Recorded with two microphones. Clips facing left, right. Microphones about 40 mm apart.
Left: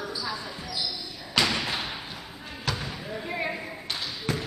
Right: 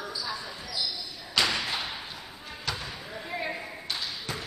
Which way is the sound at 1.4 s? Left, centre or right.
Centre.